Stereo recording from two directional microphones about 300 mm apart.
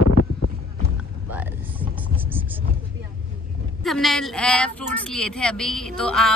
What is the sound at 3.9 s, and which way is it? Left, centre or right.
Speech, centre.